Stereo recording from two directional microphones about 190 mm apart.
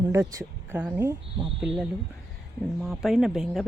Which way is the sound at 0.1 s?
15° right (ahead or behind).